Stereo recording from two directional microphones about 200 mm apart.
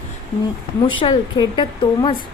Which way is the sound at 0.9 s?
25° left (ahead or behind).